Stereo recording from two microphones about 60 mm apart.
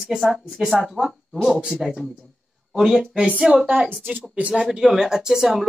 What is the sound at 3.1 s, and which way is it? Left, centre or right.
Speech, centre.